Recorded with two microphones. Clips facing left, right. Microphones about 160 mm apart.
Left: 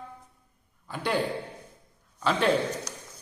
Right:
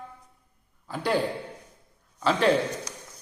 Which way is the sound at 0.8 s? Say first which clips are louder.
Right 3 dB; 5° right (ahead or behind).